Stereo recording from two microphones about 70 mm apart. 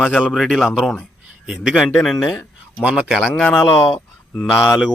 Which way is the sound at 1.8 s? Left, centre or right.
Centre.